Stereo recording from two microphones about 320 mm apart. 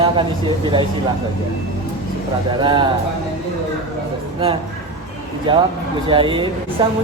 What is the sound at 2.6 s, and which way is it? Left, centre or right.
Speech, centre.